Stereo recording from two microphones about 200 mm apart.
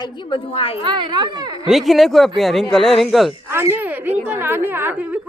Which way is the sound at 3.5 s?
10° right (ahead or behind).